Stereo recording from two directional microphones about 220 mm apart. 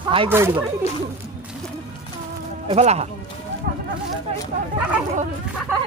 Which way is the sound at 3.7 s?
40° right (ahead or behind).